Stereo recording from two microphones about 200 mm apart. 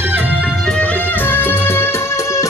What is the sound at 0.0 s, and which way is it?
Music, 10° right (ahead or behind).